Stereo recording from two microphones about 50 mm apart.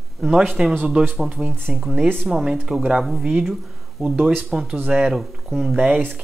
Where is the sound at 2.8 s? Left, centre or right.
Centre.